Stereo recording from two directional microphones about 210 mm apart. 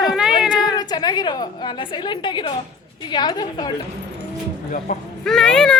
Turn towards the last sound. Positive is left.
turn(degrees=5)  # may be behind; listen again after turning